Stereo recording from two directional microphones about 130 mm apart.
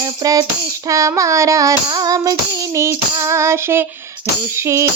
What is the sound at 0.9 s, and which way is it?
Child singing, 25° right (ahead or behind).